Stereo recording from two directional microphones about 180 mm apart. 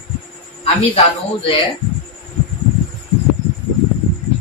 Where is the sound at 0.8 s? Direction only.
35° left (ahead or behind).